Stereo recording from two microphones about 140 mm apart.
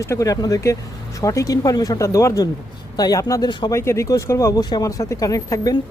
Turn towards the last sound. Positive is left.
turn(degrees=25)  # may be behind; listen again after turning